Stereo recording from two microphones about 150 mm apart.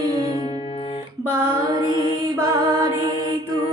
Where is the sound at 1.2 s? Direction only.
15° right (ahead or behind).